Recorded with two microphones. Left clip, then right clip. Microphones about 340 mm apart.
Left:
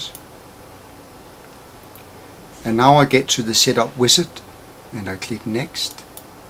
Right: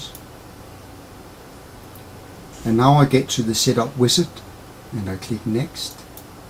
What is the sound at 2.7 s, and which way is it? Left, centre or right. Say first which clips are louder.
Speech: left 4 dB; centre.